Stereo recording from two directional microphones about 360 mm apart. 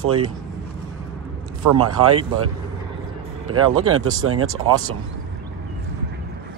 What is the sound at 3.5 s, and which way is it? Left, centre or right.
Speech, right.